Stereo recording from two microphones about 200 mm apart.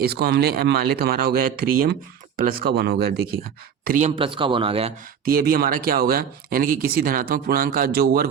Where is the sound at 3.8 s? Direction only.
40° right (ahead or behind).